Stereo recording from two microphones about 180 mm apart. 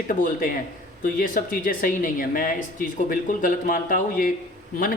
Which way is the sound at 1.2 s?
50° left (ahead or behind).